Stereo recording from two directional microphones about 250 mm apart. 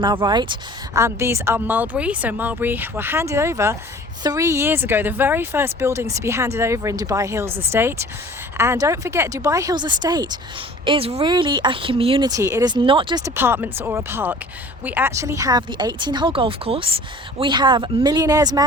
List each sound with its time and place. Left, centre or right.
0.0 s speech: centre